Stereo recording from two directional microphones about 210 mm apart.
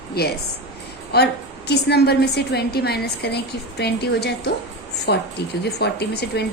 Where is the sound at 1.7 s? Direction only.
50° left (ahead or behind).